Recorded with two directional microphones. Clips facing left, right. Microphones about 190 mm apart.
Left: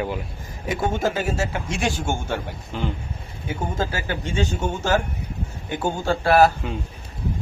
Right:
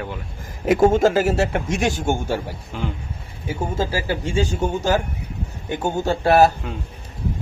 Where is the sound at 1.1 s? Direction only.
75° right (ahead or behind).